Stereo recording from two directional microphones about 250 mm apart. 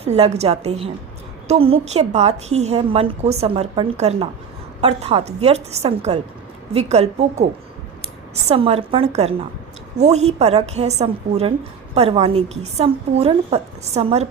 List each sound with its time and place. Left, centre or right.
0.0 s a woman's voice: right
8.4 s a woman's voice: right